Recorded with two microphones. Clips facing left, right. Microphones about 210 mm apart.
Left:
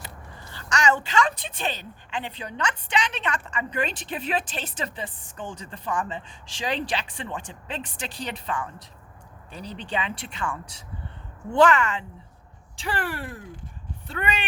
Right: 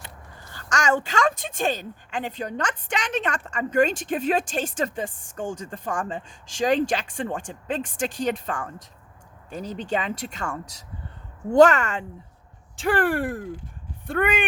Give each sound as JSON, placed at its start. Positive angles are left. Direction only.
{"t": 0.5, "sound": "a woman's voice", "side_deg": -45}